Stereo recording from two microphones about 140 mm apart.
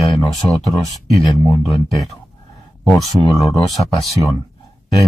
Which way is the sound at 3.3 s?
25° left (ahead or behind).